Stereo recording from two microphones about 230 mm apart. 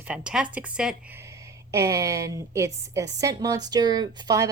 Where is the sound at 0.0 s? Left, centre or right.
Centre.